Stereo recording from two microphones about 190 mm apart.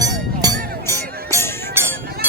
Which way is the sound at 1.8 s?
15° right (ahead or behind).